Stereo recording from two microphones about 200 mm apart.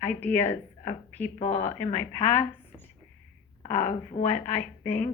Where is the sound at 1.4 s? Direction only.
35° left (ahead or behind).